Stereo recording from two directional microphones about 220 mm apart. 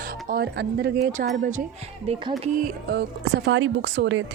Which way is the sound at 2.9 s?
50° right (ahead or behind).